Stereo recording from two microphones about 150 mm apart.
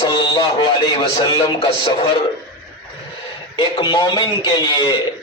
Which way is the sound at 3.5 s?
35° left (ahead or behind).